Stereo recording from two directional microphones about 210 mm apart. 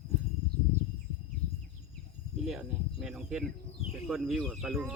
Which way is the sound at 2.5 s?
Centre (ahead or behind).